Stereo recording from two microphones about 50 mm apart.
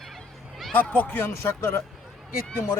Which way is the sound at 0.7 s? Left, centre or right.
Left.